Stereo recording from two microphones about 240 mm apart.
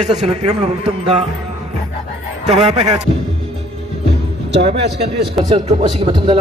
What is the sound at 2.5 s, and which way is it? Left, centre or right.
Speech, right.